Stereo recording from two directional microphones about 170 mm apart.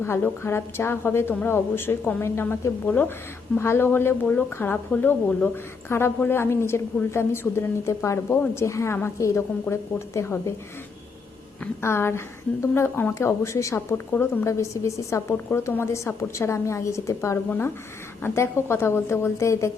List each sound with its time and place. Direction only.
0.0 s a woman's voice: 15° left (ahead or behind)
11.6 s a woman's voice: 15° left (ahead or behind)